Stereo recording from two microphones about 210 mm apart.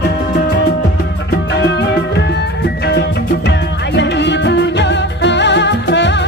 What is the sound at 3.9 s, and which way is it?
Music, 55° left (ahead or behind).